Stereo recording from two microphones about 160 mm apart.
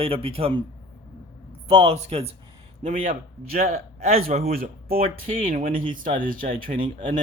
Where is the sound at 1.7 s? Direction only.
45° right (ahead or behind).